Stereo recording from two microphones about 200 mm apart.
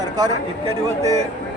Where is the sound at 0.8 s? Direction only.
15° right (ahead or behind).